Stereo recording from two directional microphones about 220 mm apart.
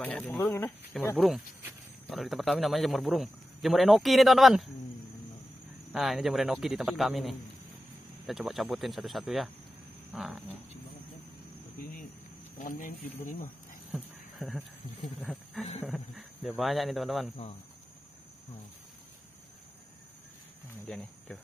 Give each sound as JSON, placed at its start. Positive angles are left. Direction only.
{"t": 0.0, "sound": "a man's voice", "side_deg": 5}
{"t": 5.9, "sound": "a man's voice", "side_deg": 0}
{"t": 11.8, "sound": "a sound", "side_deg": 40}
{"t": 12.5, "sound": "speech", "side_deg": 40}
{"t": 13.9, "sound": "a sound", "side_deg": 0}
{"t": 15.8, "sound": "a man's voice", "side_deg": 0}
{"t": 20.8, "sound": "speech", "side_deg": 0}